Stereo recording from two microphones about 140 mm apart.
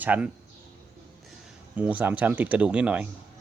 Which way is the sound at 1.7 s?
10° right (ahead or behind).